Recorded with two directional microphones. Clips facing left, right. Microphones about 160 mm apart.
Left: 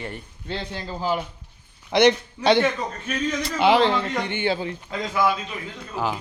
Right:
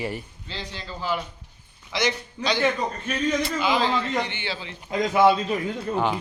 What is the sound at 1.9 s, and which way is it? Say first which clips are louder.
A man's voice: left 9 dB; 65° left (ahead or behind).